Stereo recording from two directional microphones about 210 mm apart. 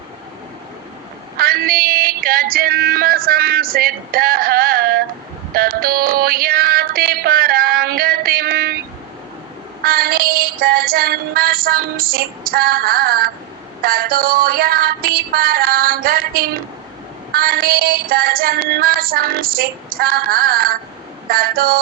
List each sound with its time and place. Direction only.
1.4 s music: 45° right (ahead or behind)
9.8 s music: 45° right (ahead or behind)
13.8 s child singing: 45° right (ahead or behind)